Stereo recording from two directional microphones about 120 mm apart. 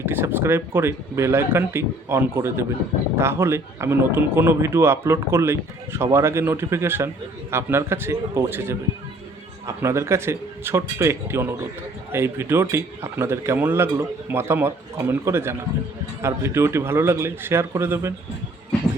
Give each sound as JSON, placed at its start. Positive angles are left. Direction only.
{"t": 0.0, "sound": "speech", "side_deg": -20}